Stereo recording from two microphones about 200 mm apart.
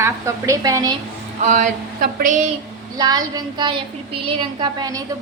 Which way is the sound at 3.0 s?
20° right (ahead or behind).